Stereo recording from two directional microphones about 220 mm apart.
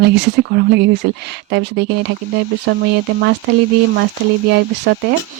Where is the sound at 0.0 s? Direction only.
50° right (ahead or behind).